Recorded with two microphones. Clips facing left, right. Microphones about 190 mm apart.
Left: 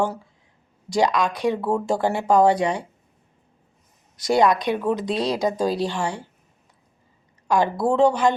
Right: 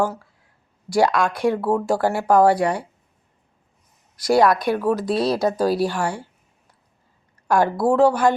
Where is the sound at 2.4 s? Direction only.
20° left (ahead or behind).